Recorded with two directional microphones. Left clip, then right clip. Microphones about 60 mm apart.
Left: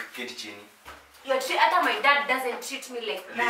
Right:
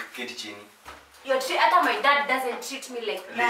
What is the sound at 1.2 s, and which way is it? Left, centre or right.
A woman's voice, centre.